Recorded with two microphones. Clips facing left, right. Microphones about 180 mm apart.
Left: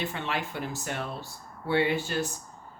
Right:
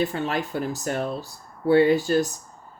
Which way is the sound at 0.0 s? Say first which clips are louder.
Right 7 dB; 40° right (ahead or behind).